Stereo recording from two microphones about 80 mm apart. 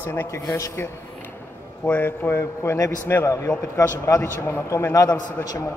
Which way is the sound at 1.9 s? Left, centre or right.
Left.